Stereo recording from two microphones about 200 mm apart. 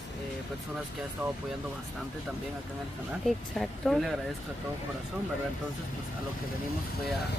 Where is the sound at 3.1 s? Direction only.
Centre (ahead or behind).